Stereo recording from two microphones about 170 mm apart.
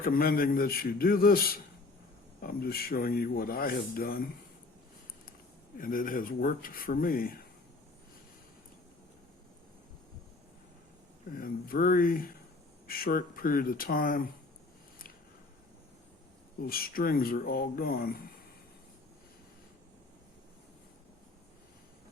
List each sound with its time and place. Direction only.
0.0 s speech: 60° left (ahead or behind)
5.7 s speech: 55° left (ahead or behind)
11.3 s speech: 55° left (ahead or behind)
16.6 s speech: 60° left (ahead or behind)